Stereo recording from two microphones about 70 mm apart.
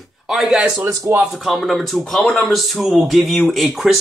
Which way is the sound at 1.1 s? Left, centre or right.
Right.